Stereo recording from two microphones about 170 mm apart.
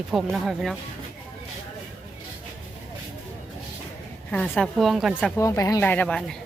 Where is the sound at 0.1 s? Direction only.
Centre (ahead or behind).